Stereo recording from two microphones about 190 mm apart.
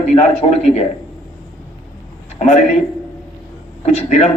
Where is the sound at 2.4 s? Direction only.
35° left (ahead or behind).